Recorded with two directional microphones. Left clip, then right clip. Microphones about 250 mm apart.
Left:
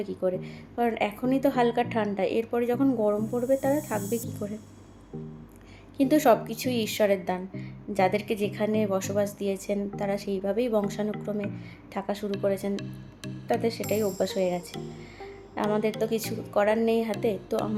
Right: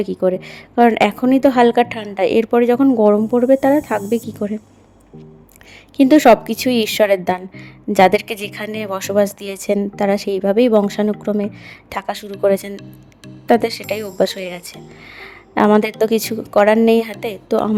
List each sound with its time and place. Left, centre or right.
0.0 s a woman's voice: right
6.0 s a woman's voice: right
15.2 s a sound: right
16.0 s a woman's voice: right